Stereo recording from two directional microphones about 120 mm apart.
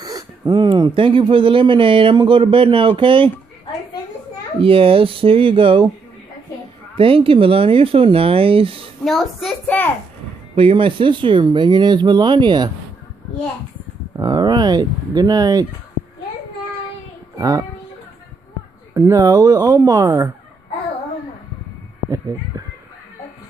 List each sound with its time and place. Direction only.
0.0 s speech: 35° right (ahead or behind)
4.6 s speech: 50° right (ahead or behind)
7.0 s speech: 50° right (ahead or behind)
9.0 s a child's voice: centre (ahead or behind)
10.5 s speech: 45° right (ahead or behind)
14.1 s speech: 35° right (ahead or behind)
17.4 s speech: 30° right (ahead or behind)
18.9 s speech: 25° right (ahead or behind)